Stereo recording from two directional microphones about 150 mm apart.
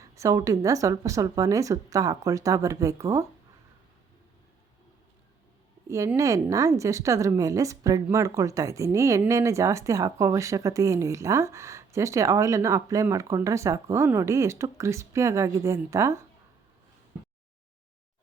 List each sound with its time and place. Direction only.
0.0 s speech: 20° right (ahead or behind)
5.9 s speech: 20° right (ahead or behind)